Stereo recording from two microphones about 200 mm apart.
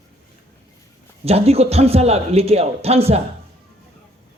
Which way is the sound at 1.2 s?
30° right (ahead or behind).